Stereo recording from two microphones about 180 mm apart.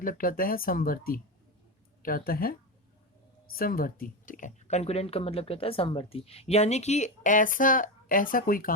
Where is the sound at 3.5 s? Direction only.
55° left (ahead or behind).